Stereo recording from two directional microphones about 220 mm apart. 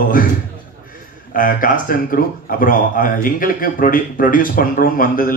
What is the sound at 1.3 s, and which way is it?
Speech, 40° left (ahead or behind).